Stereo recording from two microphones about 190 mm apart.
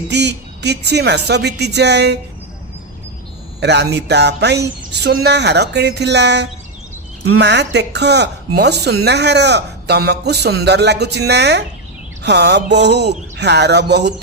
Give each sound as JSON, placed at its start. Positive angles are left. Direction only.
{"t": 0.1, "sound": "speech", "side_deg": -65}
{"t": 3.6, "sound": "speech", "side_deg": -65}